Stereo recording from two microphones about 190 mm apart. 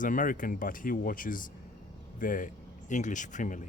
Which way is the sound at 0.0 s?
45° left (ahead or behind).